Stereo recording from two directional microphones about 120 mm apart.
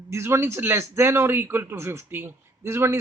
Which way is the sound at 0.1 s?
20° right (ahead or behind).